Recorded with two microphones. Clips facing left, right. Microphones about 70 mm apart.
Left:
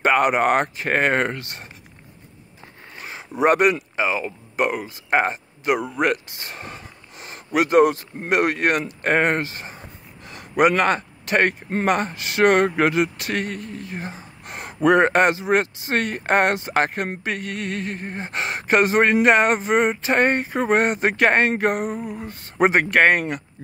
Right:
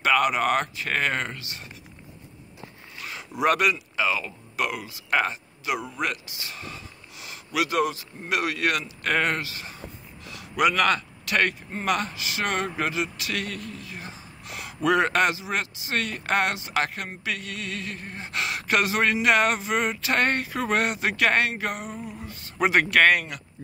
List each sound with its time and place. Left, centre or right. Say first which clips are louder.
0.0 s speech: left 4 dB; left
3.0 s speech: left 5 dB; left